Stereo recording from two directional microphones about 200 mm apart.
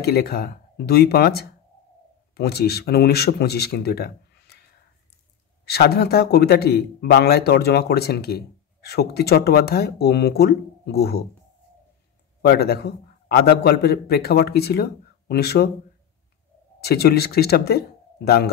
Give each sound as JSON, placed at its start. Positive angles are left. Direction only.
{"t": 0.0, "sound": "speech", "side_deg": 50}
{"t": 5.7, "sound": "speech", "side_deg": 55}
{"t": 12.4, "sound": "speech", "side_deg": 50}
{"t": 16.8, "sound": "speech", "side_deg": 50}